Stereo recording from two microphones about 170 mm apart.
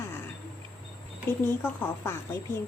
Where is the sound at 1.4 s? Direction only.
10° left (ahead or behind).